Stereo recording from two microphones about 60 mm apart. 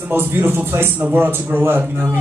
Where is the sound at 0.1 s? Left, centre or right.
Right.